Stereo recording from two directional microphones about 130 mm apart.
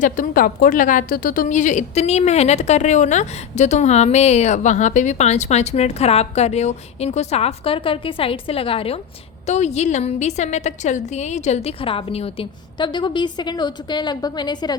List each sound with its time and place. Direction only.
0.0 s a woman's voice: 90° left; by 9.0 s 45° left (ahead or behind)
9.5 s a woman's voice: 60° left (ahead or behind)
12.7 s a woman's voice: 35° left (ahead or behind)